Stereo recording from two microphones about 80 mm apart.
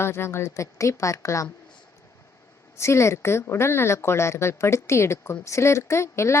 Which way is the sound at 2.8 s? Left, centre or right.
Left.